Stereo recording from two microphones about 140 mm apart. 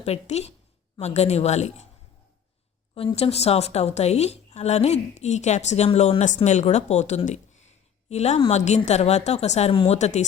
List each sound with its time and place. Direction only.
0.0 s a woman's voice: 50° left (ahead or behind)
2.9 s a woman's voice: 45° left (ahead or behind)